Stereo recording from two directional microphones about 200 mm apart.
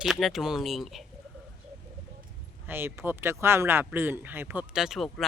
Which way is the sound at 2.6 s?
10° right (ahead or behind).